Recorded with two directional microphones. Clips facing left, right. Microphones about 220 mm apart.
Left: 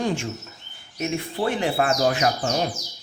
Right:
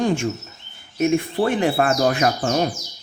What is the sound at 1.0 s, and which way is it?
Speech, 55° right (ahead or behind).